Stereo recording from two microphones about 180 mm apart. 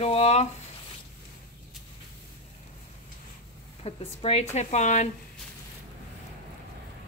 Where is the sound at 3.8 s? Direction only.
35° left (ahead or behind).